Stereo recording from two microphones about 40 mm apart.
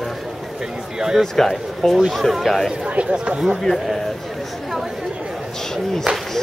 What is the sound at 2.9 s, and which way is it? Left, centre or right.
Speech, right.